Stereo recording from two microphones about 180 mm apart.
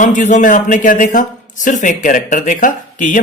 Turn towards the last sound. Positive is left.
turn(degrees=45)  # may be behind; listen again after turning